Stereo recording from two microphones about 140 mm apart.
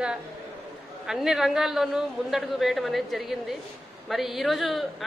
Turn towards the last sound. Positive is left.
turn(degrees=0)  # may be behind; listen again after turning